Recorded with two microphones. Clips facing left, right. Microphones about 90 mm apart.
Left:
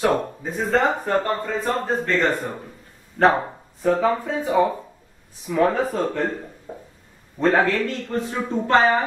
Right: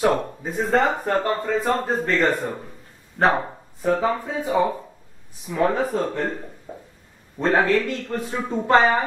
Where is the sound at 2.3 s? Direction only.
Centre (ahead or behind).